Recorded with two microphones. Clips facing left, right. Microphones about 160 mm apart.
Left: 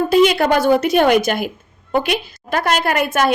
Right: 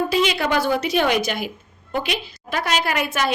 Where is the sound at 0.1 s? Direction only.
50° left (ahead or behind).